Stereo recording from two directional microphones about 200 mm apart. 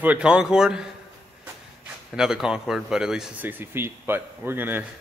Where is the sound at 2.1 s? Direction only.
5° right (ahead or behind).